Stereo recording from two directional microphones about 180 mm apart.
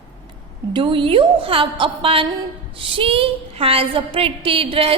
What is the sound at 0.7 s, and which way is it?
A woman's voice, 30° right (ahead or behind).